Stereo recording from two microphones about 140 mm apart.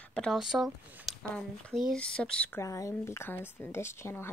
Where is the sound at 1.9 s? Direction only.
5° left (ahead or behind).